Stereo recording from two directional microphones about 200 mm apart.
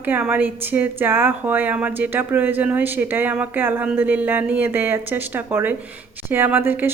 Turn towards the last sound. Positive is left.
turn(degrees=-10)  # may be behind; listen again after turning